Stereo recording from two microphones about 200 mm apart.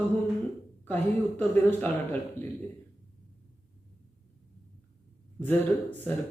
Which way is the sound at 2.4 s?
40° left (ahead or behind).